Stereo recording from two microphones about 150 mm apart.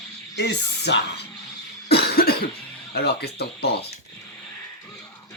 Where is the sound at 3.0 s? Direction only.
90° left.